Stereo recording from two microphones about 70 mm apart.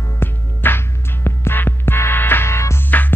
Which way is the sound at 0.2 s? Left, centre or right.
Left.